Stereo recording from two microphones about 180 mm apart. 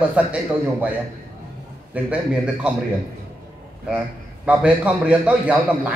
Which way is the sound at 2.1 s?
5° right (ahead or behind).